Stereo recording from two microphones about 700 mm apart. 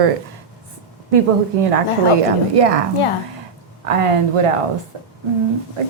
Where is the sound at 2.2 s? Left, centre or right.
Right.